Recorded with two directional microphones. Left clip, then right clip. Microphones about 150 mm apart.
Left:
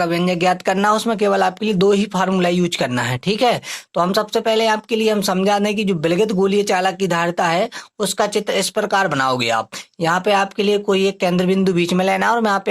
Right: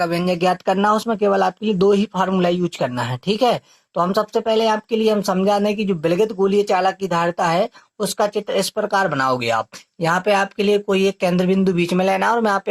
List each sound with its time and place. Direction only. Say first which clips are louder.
0.0 s speech: left 1 dB; 30° left (ahead or behind)